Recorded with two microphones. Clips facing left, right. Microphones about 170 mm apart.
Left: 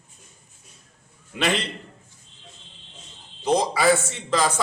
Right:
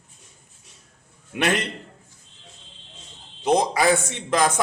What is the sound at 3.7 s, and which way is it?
Speech, 15° right (ahead or behind).